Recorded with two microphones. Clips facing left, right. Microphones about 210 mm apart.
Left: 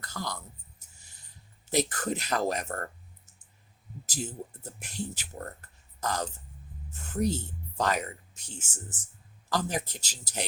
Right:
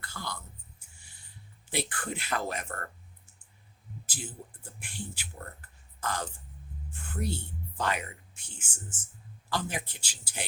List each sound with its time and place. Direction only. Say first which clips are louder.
0.0 s a sound: left 4 dB; 40° left (ahead or behind)
1.7 s speech: left 6 dB; 40° left (ahead or behind)
4.0 s speech: left 7 dB; 40° left (ahead or behind)